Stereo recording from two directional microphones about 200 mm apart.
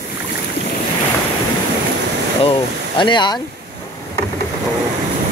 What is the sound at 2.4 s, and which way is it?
Speech, 25° left (ahead or behind).